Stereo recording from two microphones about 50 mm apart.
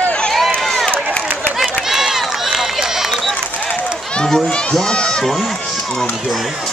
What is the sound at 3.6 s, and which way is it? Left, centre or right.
Run, left.